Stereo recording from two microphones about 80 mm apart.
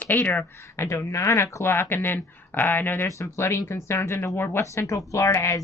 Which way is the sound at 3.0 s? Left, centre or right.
Left.